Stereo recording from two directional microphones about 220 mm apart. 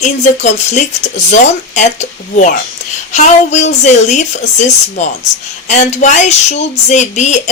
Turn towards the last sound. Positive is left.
turn(degrees=30)  # may be behind; listen again after turning